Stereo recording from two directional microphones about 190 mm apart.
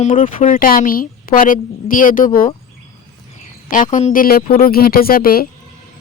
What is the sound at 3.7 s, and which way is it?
A woman's voice, 45° left (ahead or behind).